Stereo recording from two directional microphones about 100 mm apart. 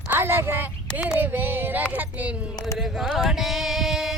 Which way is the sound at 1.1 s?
20° right (ahead or behind).